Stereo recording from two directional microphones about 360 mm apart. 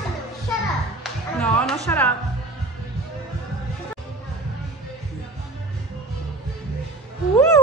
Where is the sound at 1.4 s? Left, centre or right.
Centre.